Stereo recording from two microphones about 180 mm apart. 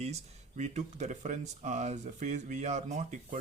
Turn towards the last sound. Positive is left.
turn(degrees=-40)  # may be behind; listen again after turning